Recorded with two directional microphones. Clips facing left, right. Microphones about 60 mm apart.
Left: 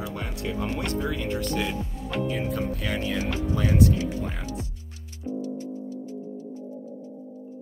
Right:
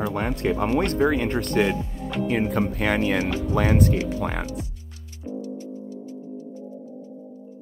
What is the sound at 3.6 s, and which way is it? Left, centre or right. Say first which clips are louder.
Speech: even; right.